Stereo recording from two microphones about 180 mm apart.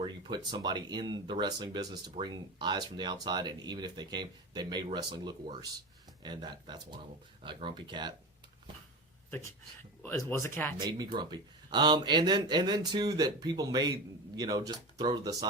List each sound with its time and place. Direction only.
0.0 s speech: 25° right (ahead or behind)
10.0 s speech: 15° left (ahead or behind)
10.8 s speech: 25° right (ahead or behind)